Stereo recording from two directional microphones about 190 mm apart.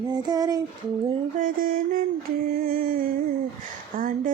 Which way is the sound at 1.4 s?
45° right (ahead or behind).